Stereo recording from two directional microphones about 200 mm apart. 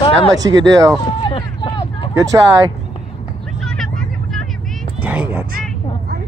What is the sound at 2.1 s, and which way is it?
Speech, 15° right (ahead or behind).